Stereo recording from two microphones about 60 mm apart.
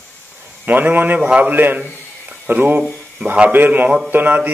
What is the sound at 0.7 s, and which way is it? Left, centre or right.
A man's voice, right.